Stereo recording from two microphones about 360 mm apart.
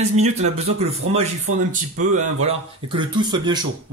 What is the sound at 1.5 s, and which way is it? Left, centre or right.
Speech, right.